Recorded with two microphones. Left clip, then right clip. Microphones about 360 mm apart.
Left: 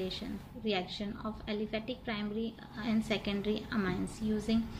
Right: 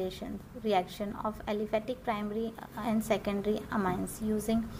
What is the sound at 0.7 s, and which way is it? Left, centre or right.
A woman's voice, centre.